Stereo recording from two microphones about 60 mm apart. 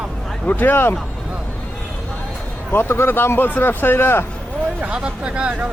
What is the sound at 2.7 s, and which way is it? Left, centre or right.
Speech, left.